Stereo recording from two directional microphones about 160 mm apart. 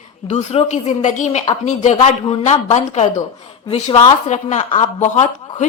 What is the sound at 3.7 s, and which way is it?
Speech, 30° left (ahead or behind).